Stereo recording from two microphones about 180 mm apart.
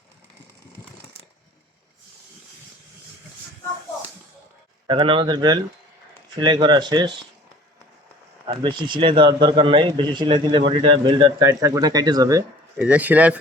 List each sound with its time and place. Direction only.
4.9 s speech: 30° right (ahead or behind)
8.4 s speech: 30° right (ahead or behind)
12.8 s a man's voice: 10° right (ahead or behind)